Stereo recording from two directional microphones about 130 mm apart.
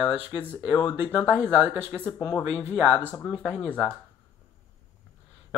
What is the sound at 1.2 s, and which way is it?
Speech, 15° right (ahead or behind).